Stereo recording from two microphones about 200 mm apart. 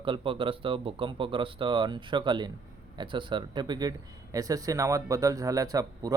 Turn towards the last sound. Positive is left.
turn(degrees=-20)  # may be behind; listen again after turning